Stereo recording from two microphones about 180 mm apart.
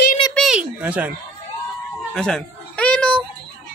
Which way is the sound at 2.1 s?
5° left (ahead or behind).